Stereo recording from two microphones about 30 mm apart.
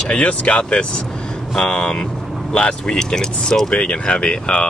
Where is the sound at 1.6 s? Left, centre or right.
Left.